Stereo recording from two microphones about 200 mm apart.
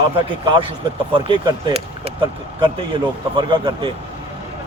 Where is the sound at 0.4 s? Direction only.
25° right (ahead or behind).